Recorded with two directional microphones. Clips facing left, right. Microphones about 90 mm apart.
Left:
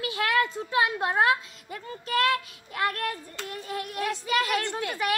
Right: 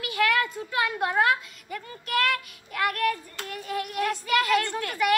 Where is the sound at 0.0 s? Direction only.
25° left (ahead or behind).